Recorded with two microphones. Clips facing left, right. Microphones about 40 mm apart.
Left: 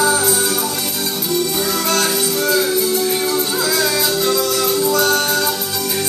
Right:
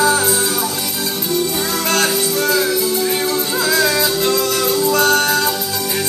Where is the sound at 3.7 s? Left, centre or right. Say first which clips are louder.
Right 4 dB; right.